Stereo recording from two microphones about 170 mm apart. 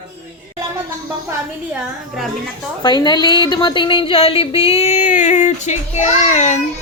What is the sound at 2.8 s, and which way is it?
Speech, 25° left (ahead or behind).